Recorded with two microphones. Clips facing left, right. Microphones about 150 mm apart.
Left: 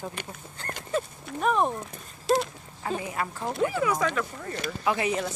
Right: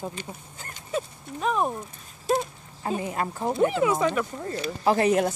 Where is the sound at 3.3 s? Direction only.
15° right (ahead or behind).